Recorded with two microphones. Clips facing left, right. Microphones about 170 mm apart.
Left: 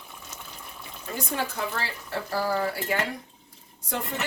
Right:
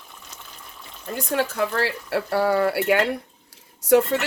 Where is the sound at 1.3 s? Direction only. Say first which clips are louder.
Right 8 dB; 80° right.